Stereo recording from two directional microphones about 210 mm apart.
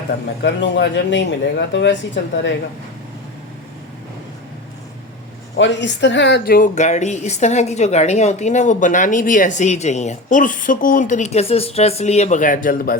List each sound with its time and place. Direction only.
0.4 s speech: 55° left (ahead or behind)
5.5 s speech: 60° left (ahead or behind); by 13.0 s 45° left (ahead or behind)